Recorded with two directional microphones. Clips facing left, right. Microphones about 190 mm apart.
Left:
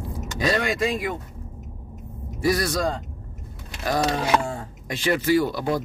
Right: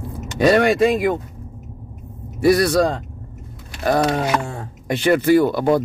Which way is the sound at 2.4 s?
65° right (ahead or behind).